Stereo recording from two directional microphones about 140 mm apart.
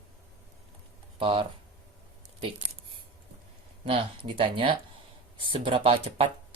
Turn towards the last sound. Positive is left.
turn(degrees=-40)  # may be behind; listen again after turning